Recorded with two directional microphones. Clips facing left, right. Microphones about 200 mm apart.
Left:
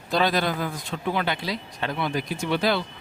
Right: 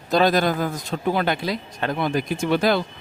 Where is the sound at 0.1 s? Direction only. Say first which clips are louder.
Right 5 dB; 45° right (ahead or behind).